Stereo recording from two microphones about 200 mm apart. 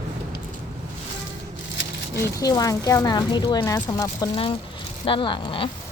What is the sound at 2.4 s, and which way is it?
Speech, 20° left (ahead or behind).